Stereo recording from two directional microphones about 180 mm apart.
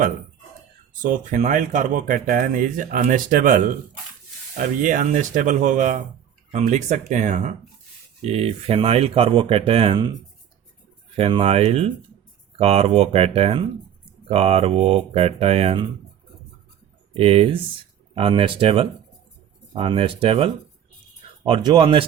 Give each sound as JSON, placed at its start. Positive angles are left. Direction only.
{"t": 1.0, "sound": "speech", "side_deg": -45}
{"t": 17.2, "sound": "speech", "side_deg": -30}